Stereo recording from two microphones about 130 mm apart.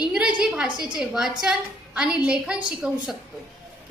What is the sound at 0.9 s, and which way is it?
A woman's voice, 5° right (ahead or behind).